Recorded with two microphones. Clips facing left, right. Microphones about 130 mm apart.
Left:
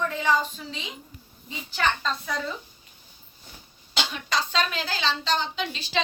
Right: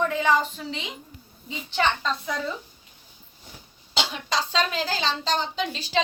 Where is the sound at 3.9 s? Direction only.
30° right (ahead or behind).